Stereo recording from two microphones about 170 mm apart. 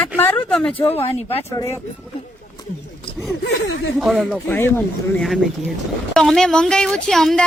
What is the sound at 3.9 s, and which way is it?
Speech, centre (ahead or behind).